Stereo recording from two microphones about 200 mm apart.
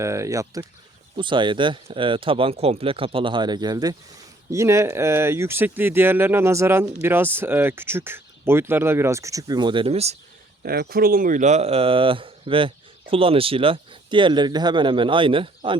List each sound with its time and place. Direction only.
0.0 s speech: 15° right (ahead or behind); by 10.2 s 30° right (ahead or behind)
10.6 s speech: 50° right (ahead or behind); by 15.8 s 25° right (ahead or behind)